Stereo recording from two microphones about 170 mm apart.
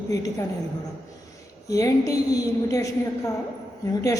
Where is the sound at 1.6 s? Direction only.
20° left (ahead or behind).